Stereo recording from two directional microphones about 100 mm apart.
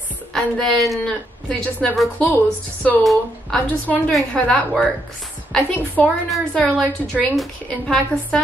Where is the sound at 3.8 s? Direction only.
15° left (ahead or behind).